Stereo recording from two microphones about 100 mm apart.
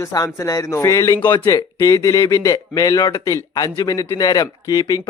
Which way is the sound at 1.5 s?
35° left (ahead or behind).